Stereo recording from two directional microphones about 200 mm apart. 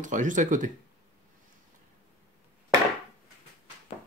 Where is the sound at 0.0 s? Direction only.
40° right (ahead or behind).